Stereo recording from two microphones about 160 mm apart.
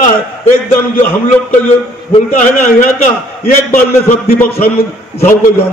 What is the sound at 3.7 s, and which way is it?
Speech, 15° left (ahead or behind).